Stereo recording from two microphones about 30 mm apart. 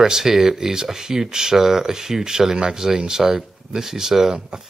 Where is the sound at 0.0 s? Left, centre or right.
Centre.